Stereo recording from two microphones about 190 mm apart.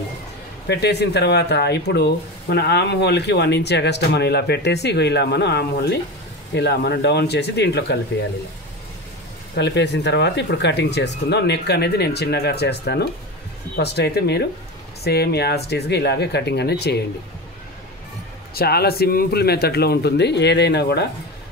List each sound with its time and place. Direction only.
0.7 s speech: 60° left (ahead or behind)
9.6 s speech: 65° left (ahead or behind)
18.5 s speech: 55° left (ahead or behind)